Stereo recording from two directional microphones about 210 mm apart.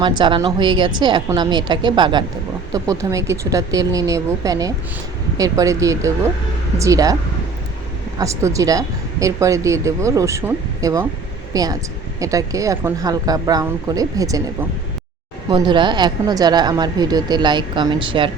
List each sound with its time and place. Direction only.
0.0 s a woman's voice: 20° right (ahead or behind)
8.2 s speech: 15° right (ahead or behind)
15.4 s a woman's voice: 20° right (ahead or behind)